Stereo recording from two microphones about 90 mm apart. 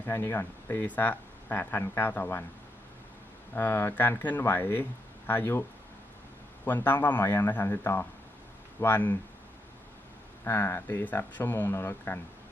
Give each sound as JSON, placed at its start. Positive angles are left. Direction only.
{"t": 0.0, "sound": "speech", "side_deg": 25}
{"t": 3.5, "sound": "speech", "side_deg": 25}
{"t": 6.8, "sound": "speech", "side_deg": 20}
{"t": 10.4, "sound": "speech", "side_deg": 25}